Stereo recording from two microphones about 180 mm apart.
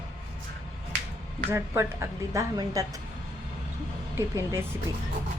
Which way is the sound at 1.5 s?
15° right (ahead or behind).